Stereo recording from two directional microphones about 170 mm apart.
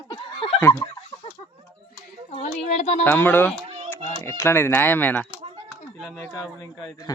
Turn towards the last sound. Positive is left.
turn(degrees=0)  # may be behind; listen again after turning